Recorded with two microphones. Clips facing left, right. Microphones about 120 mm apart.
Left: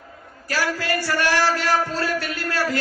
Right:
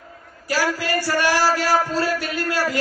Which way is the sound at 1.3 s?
40° right (ahead or behind).